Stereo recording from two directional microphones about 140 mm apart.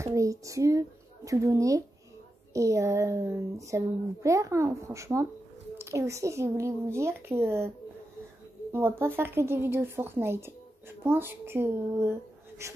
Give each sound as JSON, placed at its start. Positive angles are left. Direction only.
{"t": 0.0, "sound": "a child's voice", "side_deg": -20}
{"t": 8.7, "sound": "a woman's voice", "side_deg": -15}